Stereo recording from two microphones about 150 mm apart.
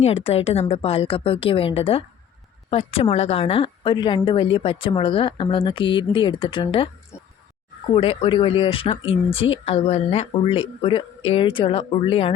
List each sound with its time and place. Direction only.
0.0 s speech: 40° left (ahead or behind)
7.9 s speech: 40° left (ahead or behind)